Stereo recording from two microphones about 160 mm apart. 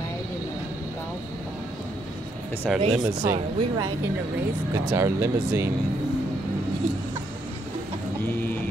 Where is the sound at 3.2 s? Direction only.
25° right (ahead or behind).